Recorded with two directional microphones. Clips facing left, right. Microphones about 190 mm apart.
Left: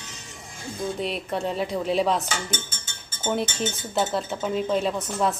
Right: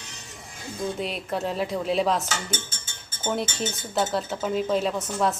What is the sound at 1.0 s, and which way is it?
Speech, centre (ahead or behind).